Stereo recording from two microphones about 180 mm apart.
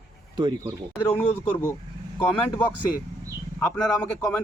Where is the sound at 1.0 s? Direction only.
15° left (ahead or behind).